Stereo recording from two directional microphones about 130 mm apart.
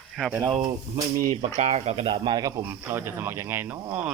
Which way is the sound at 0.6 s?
25° right (ahead or behind).